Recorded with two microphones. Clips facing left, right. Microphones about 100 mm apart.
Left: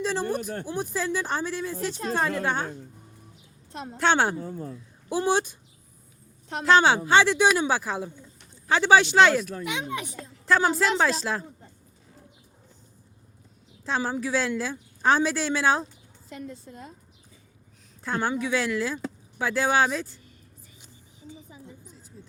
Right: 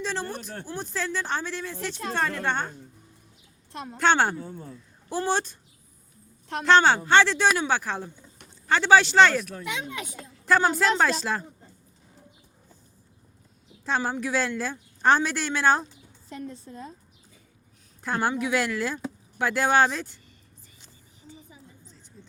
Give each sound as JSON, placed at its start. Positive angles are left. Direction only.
{"t": 0.0, "sound": "speech", "side_deg": 5}
{"t": 0.3, "sound": "speech", "side_deg": 50}
{"t": 0.6, "sound": "speech", "side_deg": 10}
{"t": 4.0, "sound": "a woman's voice", "side_deg": 5}
{"t": 4.4, "sound": "speech", "side_deg": 40}
{"t": 4.7, "sound": "a woman's voice", "side_deg": 10}
{"t": 6.7, "sound": "speech", "side_deg": 5}
{"t": 9.8, "sound": "speech", "side_deg": 25}
{"t": 10.4, "sound": "a woman's voice", "side_deg": 0}
{"t": 13.8, "sound": "a woman's voice", "side_deg": 0}
{"t": 18.0, "sound": "a woman's voice", "side_deg": -5}
{"t": 20.8, "sound": "music", "side_deg": 15}